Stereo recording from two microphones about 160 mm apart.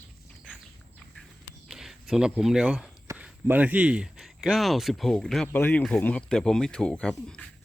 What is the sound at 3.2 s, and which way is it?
Speech, 10° right (ahead or behind).